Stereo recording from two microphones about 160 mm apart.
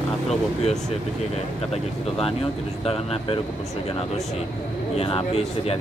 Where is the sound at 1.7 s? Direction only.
40° left (ahead or behind).